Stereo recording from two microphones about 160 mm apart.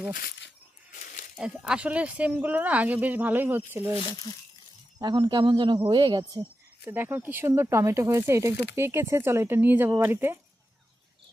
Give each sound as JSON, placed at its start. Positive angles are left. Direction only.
{"t": 0.1, "sound": "speech", "side_deg": 75}
{"t": 1.4, "sound": "speech", "side_deg": -5}
{"t": 4.9, "sound": "speech", "side_deg": -25}
{"t": 6.8, "sound": "speech", "side_deg": -15}